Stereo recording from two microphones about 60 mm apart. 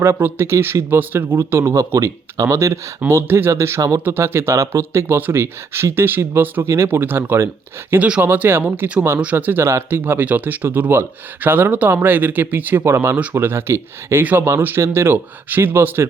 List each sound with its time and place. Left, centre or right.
0.0 s speech: right
3.8 s speech: right
4.0 s speech: right
6.6 s speech: right
7.9 s speech: centre
8.2 s speech: right